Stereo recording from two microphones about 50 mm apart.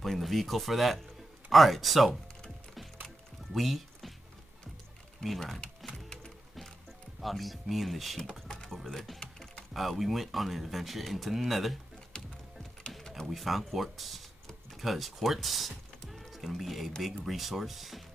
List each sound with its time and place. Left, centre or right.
0.0 s speech: centre
3.5 s speech: centre
5.2 s speech: centre
5.8 s music: centre
7.2 s speech: centre
8.6 s music: centre
9.2 s typing: centre
9.8 s speech: centre
12.1 s music: centre
13.3 s speech: centre